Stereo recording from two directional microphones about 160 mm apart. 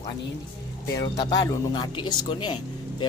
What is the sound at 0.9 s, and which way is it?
Speech, 25° left (ahead or behind).